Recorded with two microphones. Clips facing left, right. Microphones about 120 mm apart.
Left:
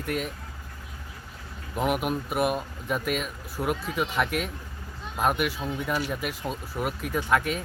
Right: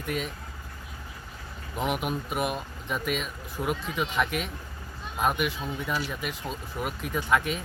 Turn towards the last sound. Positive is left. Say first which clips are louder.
# left 1 dB
turn(degrees=0)  # may be behind; listen again after turning